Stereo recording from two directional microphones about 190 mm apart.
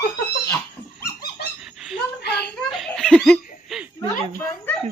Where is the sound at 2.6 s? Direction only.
Centre (ahead or behind).